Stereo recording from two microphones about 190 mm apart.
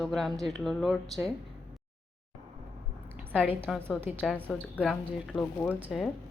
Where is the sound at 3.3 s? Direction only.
10° right (ahead or behind).